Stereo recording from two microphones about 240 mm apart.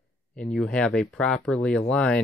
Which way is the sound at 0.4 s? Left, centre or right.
Centre.